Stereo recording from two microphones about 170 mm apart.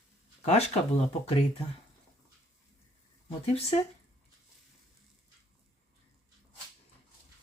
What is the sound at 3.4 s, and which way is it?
Speech, 35° left (ahead or behind).